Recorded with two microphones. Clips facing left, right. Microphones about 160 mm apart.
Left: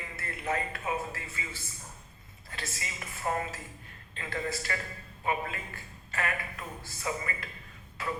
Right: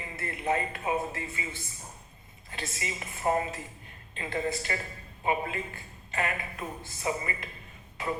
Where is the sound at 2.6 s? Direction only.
20° right (ahead or behind).